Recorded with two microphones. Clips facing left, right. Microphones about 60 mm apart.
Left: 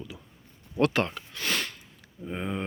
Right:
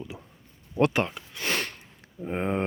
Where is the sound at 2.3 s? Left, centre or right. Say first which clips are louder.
Right 5 dB; right.